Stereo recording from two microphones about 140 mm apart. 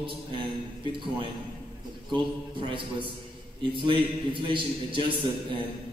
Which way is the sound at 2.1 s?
35° right (ahead or behind).